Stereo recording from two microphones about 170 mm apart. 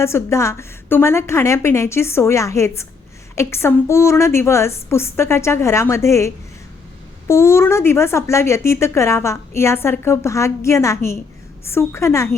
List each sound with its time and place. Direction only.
0.0 s speech: 15° left (ahead or behind)